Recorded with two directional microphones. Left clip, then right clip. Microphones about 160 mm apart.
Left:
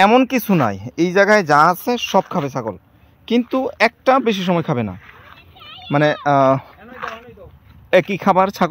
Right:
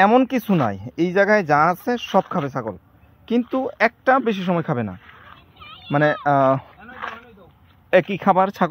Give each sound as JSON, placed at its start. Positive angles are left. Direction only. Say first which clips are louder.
{"t": 0.0, "sound": "a man's voice", "louder": "left 3 dB", "side_deg": 20}
{"t": 4.9, "sound": "fowl", "louder": "left 3 dB", "side_deg": -10}
{"t": 5.6, "sound": "a sound", "louder": "left 4 dB", "side_deg": -25}
{"t": 5.9, "sound": "speech", "louder": "left 2 dB", "side_deg": 25}
{"t": 6.9, "sound": "chop", "louder": "left 3 dB", "side_deg": -10}
{"t": 7.9, "sound": "speech", "louder": "left 2 dB", "side_deg": 25}